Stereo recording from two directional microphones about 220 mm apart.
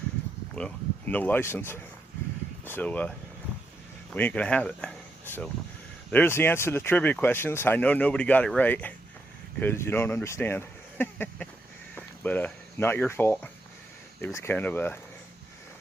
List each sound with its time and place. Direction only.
0.5 s speech: 5° left (ahead or behind)
4.1 s speech: 5° left (ahead or behind)